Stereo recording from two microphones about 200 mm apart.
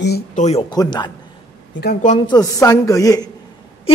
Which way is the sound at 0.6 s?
20° left (ahead or behind).